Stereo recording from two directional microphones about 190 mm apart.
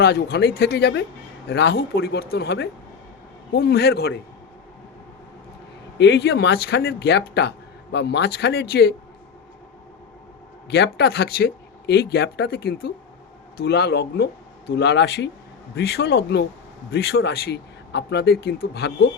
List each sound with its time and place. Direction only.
0.0 s speech: 55° left (ahead or behind)
6.0 s speech: 65° left (ahead or behind)
10.7 s speech: 60° left (ahead or behind)